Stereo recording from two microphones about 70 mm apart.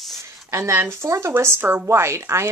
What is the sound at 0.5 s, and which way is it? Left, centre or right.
Speech, right.